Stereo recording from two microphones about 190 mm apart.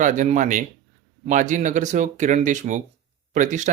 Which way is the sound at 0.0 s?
40° right (ahead or behind).